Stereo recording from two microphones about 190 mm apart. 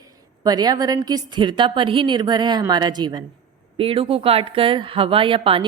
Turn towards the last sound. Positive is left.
turn(degrees=-30)  # may be behind; listen again after turning